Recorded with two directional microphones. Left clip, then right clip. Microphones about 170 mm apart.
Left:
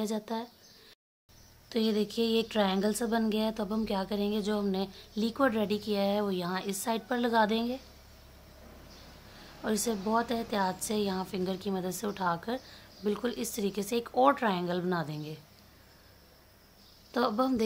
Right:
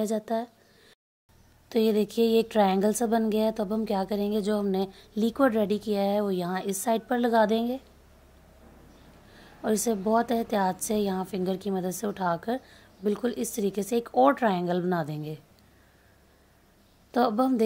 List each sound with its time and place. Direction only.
0.0 s speech: 25° right (ahead or behind)
1.7 s speech: 30° right (ahead or behind)
9.6 s speech: 30° right (ahead or behind)
17.1 s speech: 30° right (ahead or behind)